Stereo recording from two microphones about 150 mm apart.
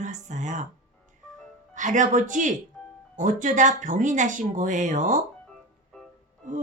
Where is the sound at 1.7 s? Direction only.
55° right (ahead or behind).